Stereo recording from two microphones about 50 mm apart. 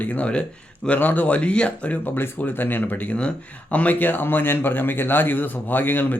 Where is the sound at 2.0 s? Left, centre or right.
Left.